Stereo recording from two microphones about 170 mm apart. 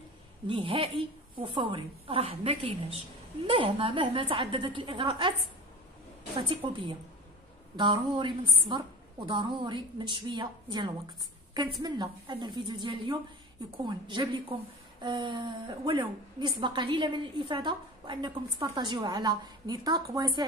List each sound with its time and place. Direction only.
0.5 s a woman's voice: 30° right (ahead or behind)
6.3 s a woman's voice: 30° right (ahead or behind)